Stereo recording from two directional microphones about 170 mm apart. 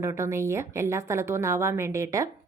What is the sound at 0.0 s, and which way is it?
A woman's voice, 15° right (ahead or behind).